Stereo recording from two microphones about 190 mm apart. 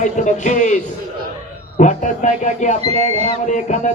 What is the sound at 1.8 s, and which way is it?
Music, 40° left (ahead or behind).